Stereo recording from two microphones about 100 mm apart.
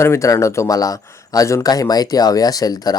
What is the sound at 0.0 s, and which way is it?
Speech, 30° left (ahead or behind).